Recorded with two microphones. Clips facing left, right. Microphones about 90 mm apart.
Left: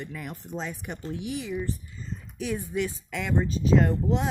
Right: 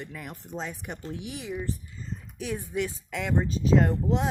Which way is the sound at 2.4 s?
45° right (ahead or behind).